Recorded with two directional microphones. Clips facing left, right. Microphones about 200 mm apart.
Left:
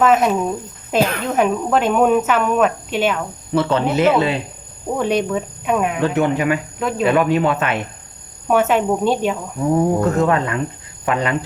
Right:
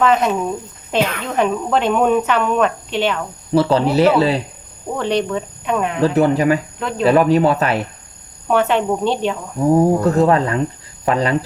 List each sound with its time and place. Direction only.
0.0 s speech: 5° left (ahead or behind)
3.5 s speech: 35° right (ahead or behind)
4.9 s speech: 10° left (ahead or behind)
6.0 s speech: 35° right (ahead or behind)
6.7 s speech: 5° left (ahead or behind)
7.0 s speech: 35° right (ahead or behind)
8.4 s speech: 5° left (ahead or behind)
9.7 s speech: 35° right (ahead or behind)